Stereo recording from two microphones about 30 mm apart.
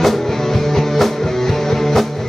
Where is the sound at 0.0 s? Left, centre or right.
Centre.